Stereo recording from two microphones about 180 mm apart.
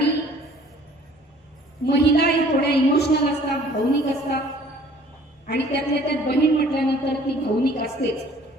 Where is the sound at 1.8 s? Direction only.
65° left (ahead or behind).